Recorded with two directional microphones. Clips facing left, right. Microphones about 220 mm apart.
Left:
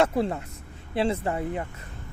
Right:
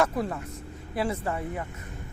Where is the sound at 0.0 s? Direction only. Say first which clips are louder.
Left 3 dB; 25° left (ahead or behind).